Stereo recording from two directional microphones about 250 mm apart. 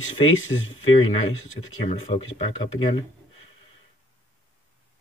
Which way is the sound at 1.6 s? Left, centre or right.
Left.